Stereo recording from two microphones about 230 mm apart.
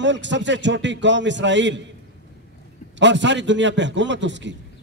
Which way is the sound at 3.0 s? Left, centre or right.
Right.